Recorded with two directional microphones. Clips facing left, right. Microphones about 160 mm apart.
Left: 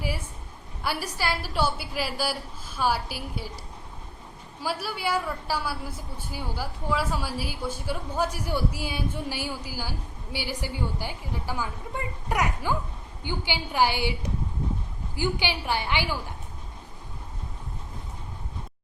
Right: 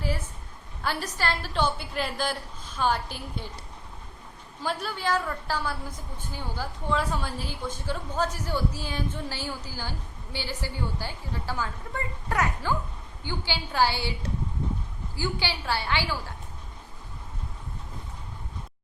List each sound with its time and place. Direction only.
0.8 s a woman's voice: 10° left (ahead or behind)
4.6 s a woman's voice: 5° left (ahead or behind)